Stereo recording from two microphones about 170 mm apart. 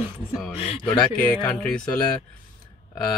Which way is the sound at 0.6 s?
35° left (ahead or behind).